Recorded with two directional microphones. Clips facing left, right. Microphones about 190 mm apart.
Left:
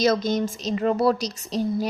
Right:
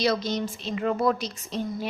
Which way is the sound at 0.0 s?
50° left (ahead or behind).